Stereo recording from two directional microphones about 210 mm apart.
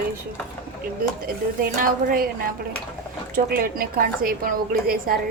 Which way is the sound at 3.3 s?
45° right (ahead or behind).